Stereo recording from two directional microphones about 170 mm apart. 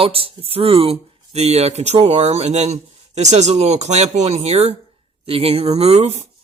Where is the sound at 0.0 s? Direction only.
35° right (ahead or behind).